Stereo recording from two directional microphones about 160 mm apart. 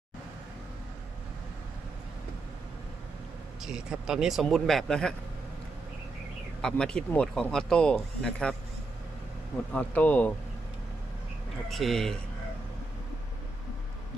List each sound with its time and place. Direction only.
3.6 s speech: 5° right (ahead or behind)
6.6 s speech: 5° left (ahead or behind)
9.7 s speech: 10° left (ahead or behind)
11.7 s speech: centre (ahead or behind)